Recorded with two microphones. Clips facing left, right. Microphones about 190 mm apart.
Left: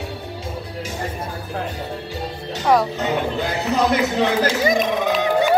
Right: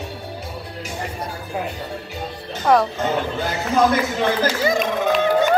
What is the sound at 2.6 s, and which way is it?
Speech, centre (ahead or behind).